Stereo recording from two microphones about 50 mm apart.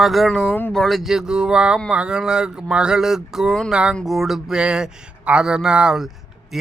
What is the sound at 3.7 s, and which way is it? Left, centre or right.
Speech, centre.